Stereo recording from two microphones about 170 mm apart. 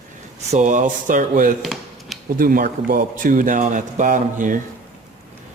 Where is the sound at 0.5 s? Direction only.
45° right (ahead or behind).